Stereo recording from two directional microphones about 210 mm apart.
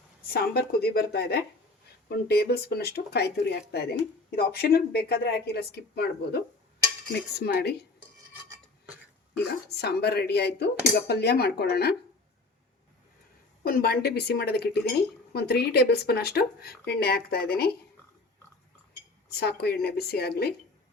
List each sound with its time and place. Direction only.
0.3 s speech: 50° left (ahead or behind)
9.6 s speech: 50° left (ahead or behind)
13.7 s speech: 45° left (ahead or behind)
19.3 s speech: 50° left (ahead or behind)